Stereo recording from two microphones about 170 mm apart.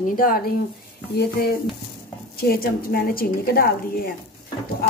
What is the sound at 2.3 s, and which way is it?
A woman's voice, 60° left (ahead or behind).